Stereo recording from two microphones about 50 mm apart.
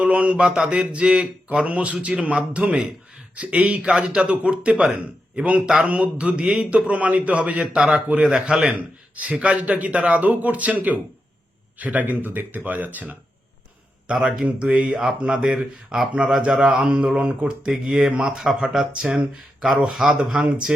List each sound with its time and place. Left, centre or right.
0.0 s a man's voice: right
14.1 s speech: centre
16.8 s speech: right
17.7 s speech: centre
20.1 s speech: right